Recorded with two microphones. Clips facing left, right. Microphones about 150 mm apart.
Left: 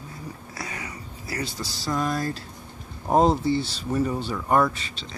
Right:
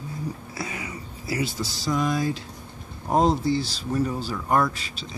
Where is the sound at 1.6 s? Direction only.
Centre (ahead or behind).